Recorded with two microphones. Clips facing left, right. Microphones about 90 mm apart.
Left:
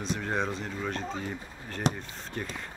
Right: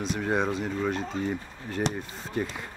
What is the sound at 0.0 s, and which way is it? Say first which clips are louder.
Speech: right 4 dB; 5° right (ahead or behind).